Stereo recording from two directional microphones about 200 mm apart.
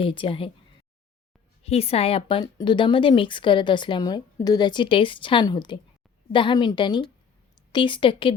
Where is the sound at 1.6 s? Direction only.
30° left (ahead or behind).